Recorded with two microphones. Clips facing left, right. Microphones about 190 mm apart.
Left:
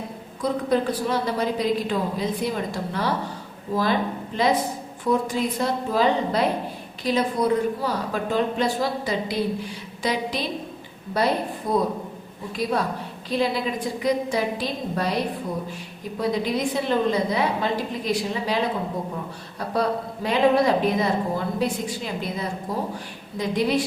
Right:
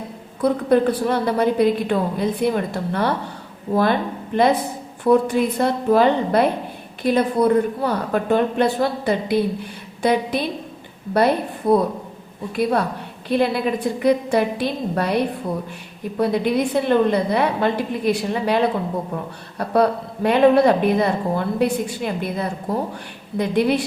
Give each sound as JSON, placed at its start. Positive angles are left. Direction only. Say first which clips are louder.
{"t": 0.4, "sound": "a woman's voice", "louder": "right 6 dB", "side_deg": -60}
{"t": 4.4, "sound": "a woman's voice", "louder": "right 4 dB", "side_deg": -60}
{"t": 13.2, "sound": "a woman's voice", "louder": "right 5 dB", "side_deg": -60}